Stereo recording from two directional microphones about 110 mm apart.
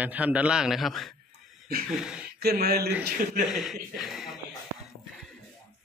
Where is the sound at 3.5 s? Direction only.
Centre (ahead or behind).